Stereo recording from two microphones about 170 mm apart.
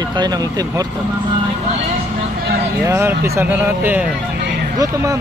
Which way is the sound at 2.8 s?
15° right (ahead or behind).